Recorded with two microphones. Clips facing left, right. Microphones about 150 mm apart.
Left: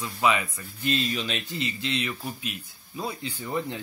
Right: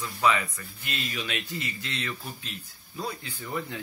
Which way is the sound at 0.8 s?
30° left (ahead or behind).